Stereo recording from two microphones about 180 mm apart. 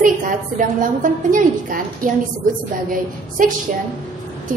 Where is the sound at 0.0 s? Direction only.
45° right (ahead or behind).